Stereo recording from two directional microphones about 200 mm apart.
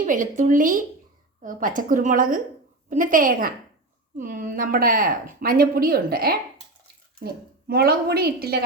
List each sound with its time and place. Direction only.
0.0 s a woman's voice: 40° right (ahead or behind)
7.7 s a woman's voice: 50° right (ahead or behind)